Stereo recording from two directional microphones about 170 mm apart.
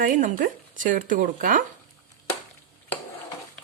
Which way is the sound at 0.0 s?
50° right (ahead or behind).